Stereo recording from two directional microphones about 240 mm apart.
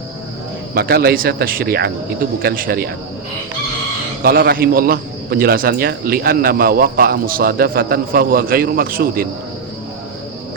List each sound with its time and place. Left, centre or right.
0.7 s a man's voice: right
4.2 s a man's voice: right